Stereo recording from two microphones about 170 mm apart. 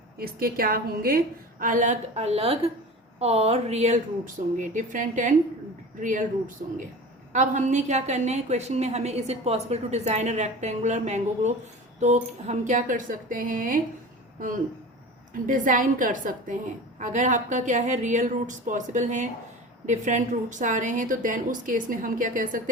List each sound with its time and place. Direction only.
0.2 s a woman's voice: 60° right (ahead or behind)
15.3 s a woman's voice: 50° right (ahead or behind)